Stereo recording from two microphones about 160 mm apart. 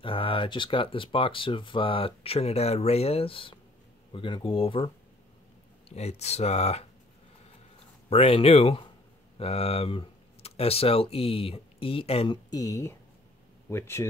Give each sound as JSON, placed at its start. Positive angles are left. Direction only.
{"t": 0.0, "sound": "speech", "side_deg": 35}
{"t": 8.1, "sound": "speech", "side_deg": 40}
{"t": 12.4, "sound": "speech", "side_deg": 25}